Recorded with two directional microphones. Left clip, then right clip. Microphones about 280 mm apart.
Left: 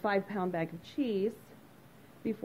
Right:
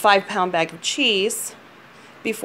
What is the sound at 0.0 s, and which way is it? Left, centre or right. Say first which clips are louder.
Speech: right 15 dB; centre.